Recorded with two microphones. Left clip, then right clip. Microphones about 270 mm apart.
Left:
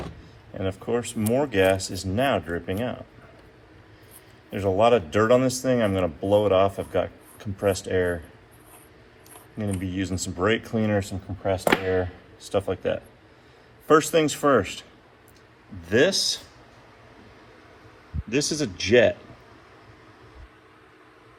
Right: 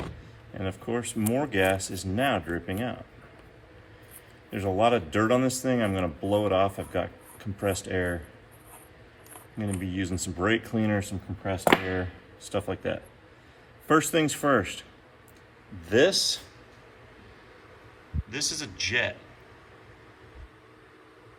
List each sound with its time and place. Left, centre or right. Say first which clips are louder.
0.5 s speech: left 5 dB; centre
4.9 s speech: left 6 dB; centre
9.6 s speech: left 3 dB; centre
15.9 s speech: left 1 dB; left
18.3 s speech: left 7 dB; centre